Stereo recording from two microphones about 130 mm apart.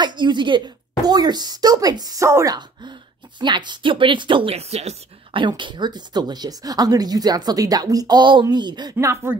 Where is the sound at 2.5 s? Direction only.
35° right (ahead or behind); by 4.9 s 55° right (ahead or behind).